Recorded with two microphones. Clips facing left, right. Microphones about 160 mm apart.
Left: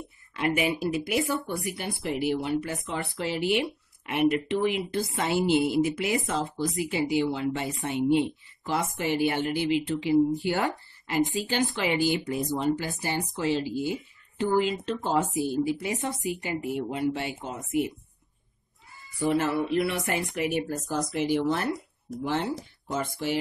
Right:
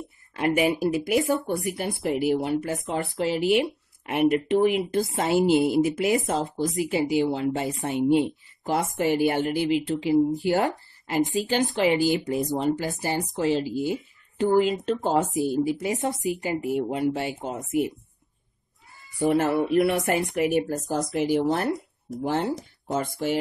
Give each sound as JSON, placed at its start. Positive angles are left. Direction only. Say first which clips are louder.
{"t": 0.4, "sound": "a woman's voice", "louder": "right 4 dB", "side_deg": -40}
{"t": 19.2, "sound": "a woman's voice", "louder": "right 3 dB", "side_deg": -45}